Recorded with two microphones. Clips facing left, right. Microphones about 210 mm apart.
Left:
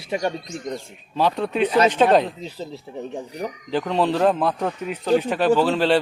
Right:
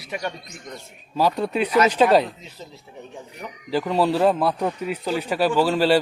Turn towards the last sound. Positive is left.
turn(degrees=-10)  # may be behind; listen again after turning